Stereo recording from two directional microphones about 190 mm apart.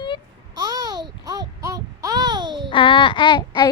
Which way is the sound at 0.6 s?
20° right (ahead or behind).